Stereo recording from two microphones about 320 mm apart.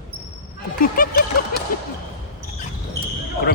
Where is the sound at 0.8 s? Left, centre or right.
Left.